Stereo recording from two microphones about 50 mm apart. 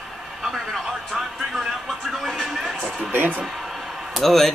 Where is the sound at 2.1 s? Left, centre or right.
Centre.